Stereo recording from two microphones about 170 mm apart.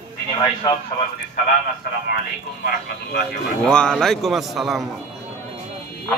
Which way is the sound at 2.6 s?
65° left (ahead or behind).